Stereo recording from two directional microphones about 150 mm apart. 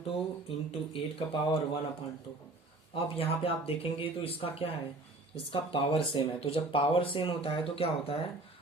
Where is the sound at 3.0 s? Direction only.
40° left (ahead or behind).